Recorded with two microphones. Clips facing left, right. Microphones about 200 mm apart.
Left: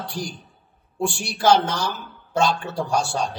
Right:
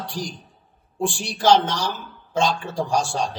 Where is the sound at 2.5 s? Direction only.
40° right (ahead or behind).